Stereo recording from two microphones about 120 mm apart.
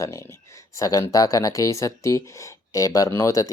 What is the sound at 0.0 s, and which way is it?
Speech, 25° left (ahead or behind).